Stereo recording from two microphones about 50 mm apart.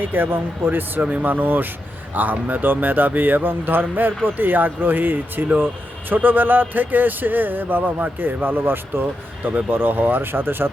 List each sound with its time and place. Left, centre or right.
0.0 s a man's voice: right